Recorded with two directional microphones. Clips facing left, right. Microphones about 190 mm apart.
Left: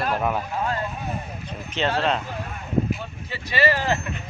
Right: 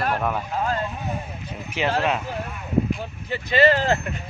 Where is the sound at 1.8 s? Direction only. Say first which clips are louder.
Even; 10° right (ahead or behind).